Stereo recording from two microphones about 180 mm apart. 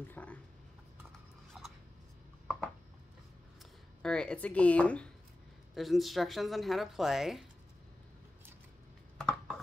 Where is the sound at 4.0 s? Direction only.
5° left (ahead or behind).